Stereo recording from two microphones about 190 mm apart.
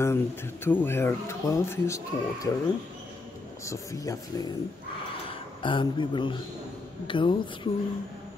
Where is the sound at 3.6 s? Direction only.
15° left (ahead or behind).